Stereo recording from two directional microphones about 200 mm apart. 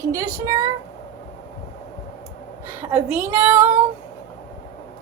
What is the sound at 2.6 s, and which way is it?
A woman's voice, 10° right (ahead or behind).